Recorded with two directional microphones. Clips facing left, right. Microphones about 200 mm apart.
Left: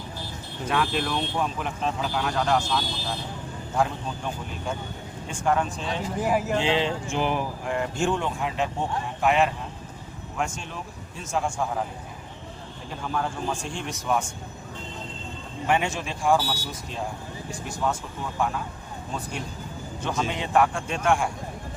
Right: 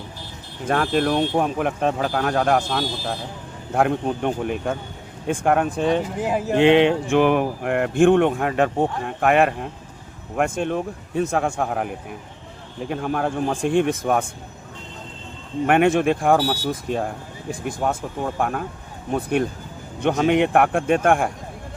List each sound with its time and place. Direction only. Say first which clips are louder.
0.7 s speech: right 6 dB; 50° right (ahead or behind); by 11.9 s 65° right (ahead or behind)
12.9 s speech: right 6 dB; 60° right (ahead or behind)
15.6 s speech: right 9 dB; 60° right (ahead or behind)